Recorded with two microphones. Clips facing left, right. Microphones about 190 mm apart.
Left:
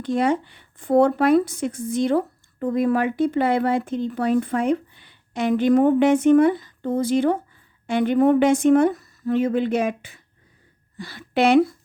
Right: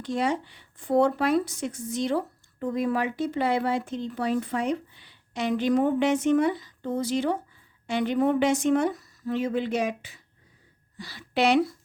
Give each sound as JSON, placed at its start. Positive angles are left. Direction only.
{"t": 0.0, "sound": "speech", "side_deg": 55}